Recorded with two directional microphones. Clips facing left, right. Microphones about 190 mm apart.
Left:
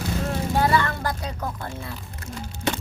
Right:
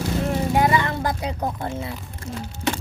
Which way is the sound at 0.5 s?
15° right (ahead or behind).